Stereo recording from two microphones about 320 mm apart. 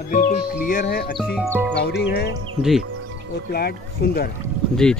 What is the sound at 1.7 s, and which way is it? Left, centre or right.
Speech, left.